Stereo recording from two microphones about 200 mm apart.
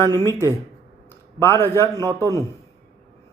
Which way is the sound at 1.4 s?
10° left (ahead or behind).